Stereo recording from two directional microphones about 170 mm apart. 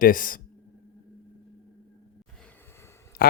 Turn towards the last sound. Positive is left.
turn(degrees=15)  # may be behind; listen again after turning